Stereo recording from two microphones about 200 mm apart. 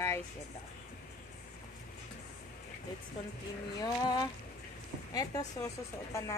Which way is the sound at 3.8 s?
20° left (ahead or behind).